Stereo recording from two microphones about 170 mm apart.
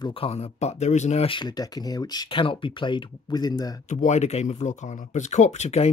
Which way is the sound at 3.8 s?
45° left (ahead or behind).